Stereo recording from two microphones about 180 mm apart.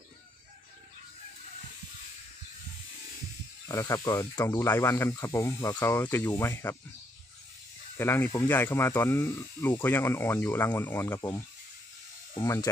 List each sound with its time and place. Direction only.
3.6 s speech: 20° left (ahead or behind)
8.0 s speech: 15° left (ahead or behind)